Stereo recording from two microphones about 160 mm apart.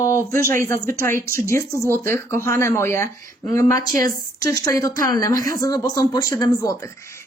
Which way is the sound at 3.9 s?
60° right (ahead or behind).